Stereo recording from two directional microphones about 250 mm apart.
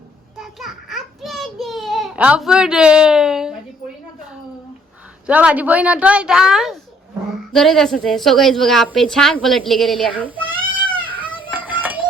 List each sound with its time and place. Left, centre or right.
0.3 s a sound: centre
5.2 s a woman's voice: centre
11.3 s music: centre